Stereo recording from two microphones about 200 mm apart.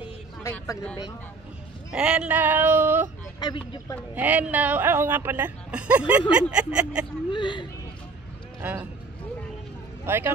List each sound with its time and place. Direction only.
0.0 s a sound: 15° left (ahead or behind)
1.9 s a woman's voice: 5° right (ahead or behind)
4.1 s a woman's voice: 10° right (ahead or behind)
7.3 s speech: 25° left (ahead or behind)
8.5 s speech: 10° right (ahead or behind)
10.0 s speech: 10° right (ahead or behind)